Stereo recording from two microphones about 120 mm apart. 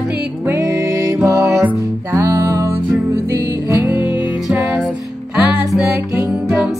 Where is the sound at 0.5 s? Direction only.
25° right (ahead or behind).